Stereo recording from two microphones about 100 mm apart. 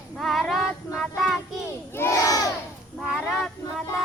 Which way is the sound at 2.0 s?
30° left (ahead or behind).